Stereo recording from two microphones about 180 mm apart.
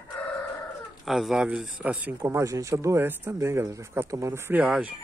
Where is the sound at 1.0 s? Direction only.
Centre (ahead or behind).